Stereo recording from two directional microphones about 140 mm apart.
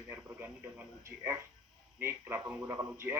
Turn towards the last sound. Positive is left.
turn(degrees=-15)  # may be behind; listen again after turning